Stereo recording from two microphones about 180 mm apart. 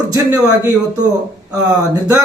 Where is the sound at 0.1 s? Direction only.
20° right (ahead or behind).